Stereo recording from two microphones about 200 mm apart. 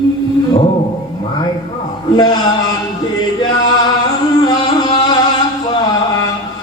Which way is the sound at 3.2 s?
20° left (ahead or behind).